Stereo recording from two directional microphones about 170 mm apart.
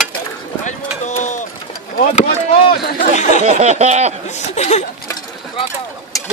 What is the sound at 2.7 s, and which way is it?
Chatter, 65° left (ahead or behind).